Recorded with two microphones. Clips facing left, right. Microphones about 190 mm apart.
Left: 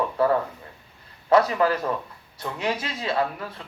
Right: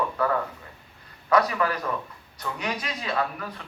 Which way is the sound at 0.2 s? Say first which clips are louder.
Left 4 dB; 30° left (ahead or behind).